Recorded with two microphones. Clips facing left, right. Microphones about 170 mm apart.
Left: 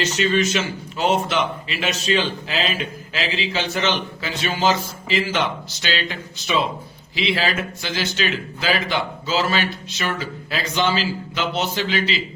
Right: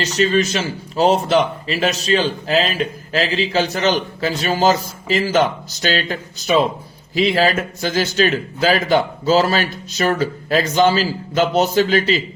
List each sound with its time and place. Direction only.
0.0 s a man's voice: 40° right (ahead or behind)